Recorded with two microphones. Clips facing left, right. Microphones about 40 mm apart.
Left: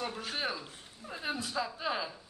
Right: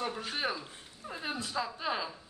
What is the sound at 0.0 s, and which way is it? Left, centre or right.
Speech, centre.